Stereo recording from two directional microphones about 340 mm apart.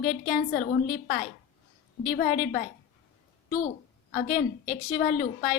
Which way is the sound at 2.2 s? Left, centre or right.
Left.